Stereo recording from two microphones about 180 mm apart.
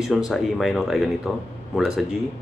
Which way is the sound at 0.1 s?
Centre (ahead or behind).